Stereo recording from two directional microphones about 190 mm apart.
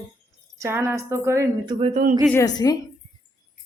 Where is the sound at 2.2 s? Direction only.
15° left (ahead or behind).